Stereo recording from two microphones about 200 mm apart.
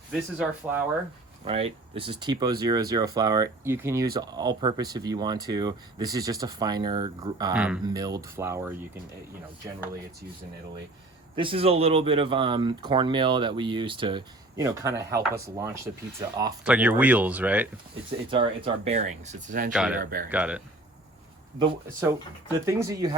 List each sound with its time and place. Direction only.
0.1 s speech: 5° right (ahead or behind)
1.5 s speech: 30° right (ahead or behind)
7.5 s speech: 5° right (ahead or behind)
7.9 s speech: 20° right (ahead or behind)
11.3 s speech: 25° right (ahead or behind); by 17.7 s 10° right (ahead or behind)
18.3 s speech: 25° right (ahead or behind); by 19.7 s 45° right (ahead or behind)
19.7 s speech: 5° right (ahead or behind)
20.0 s speech: 45° right (ahead or behind)
20.3 s speech: 5° right (ahead or behind)
22.6 s speech: 15° right (ahead or behind)